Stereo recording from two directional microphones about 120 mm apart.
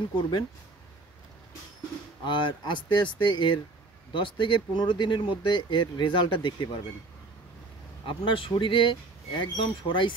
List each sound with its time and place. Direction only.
2.2 s speech: 40° left (ahead or behind)
8.0 s speech: 45° left (ahead or behind)